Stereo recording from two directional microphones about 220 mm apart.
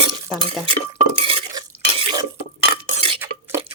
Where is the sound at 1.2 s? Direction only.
25° right (ahead or behind).